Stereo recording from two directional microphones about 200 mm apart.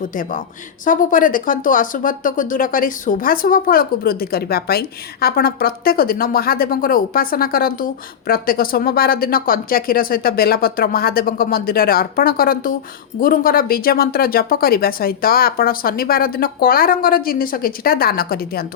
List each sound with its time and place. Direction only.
0.1 s speech: 40° left (ahead or behind)